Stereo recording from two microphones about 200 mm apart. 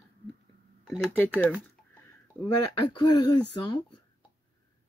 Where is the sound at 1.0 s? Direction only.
10° left (ahead or behind).